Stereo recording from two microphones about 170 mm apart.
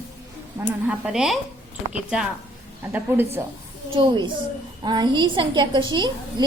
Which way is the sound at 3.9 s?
25° right (ahead or behind).